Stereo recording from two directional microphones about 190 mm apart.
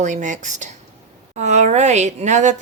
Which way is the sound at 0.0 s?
40° right (ahead or behind).